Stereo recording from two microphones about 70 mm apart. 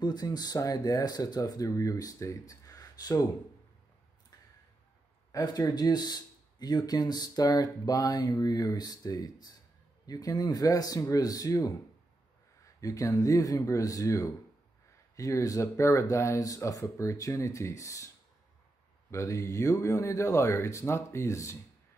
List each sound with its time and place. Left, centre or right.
0.0 s speech: left
0.6 s speech: left
1.5 s speech: left
5.3 s a man's voice: left